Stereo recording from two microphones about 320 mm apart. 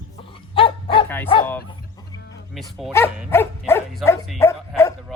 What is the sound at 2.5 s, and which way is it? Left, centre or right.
Cattle, centre.